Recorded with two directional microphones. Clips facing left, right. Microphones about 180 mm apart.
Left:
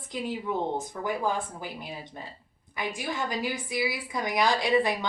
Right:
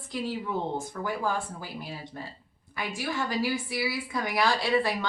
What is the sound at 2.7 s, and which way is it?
A woman's voice, 20° left (ahead or behind).